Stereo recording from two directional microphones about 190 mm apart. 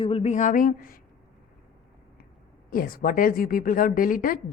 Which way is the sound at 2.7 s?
50° left (ahead or behind).